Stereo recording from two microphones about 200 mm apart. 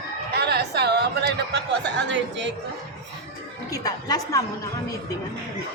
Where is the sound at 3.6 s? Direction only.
15° left (ahead or behind).